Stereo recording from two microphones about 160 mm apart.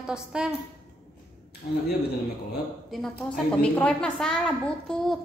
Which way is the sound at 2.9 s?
Centre (ahead or behind).